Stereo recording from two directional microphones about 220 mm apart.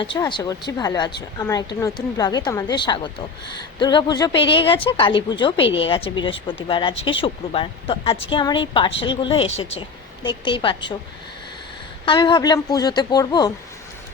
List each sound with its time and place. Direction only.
0.0 s a woman's voice: 20° left (ahead or behind)
12.0 s a woman's voice: 20° left (ahead or behind)